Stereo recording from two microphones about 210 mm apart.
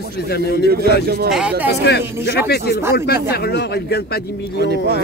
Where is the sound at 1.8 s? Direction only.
55° left (ahead or behind).